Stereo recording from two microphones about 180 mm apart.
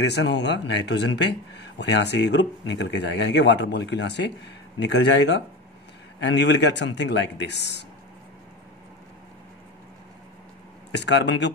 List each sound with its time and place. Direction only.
0.0 s speech: 75° left (ahead or behind)
10.9 s speech: 75° left (ahead or behind)